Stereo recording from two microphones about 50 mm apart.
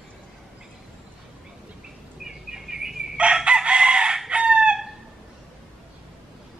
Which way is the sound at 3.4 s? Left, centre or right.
Right.